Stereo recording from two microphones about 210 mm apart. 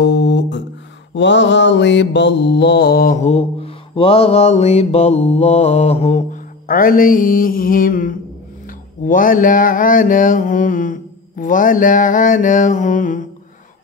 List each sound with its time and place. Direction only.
0.0 s music: 55° left (ahead or behind)
1.1 s mantra: 60° left (ahead or behind); by 13.3 s 40° left (ahead or behind)